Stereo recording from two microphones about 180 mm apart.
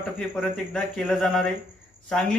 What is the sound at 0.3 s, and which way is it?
A man's voice, 5° left (ahead or behind).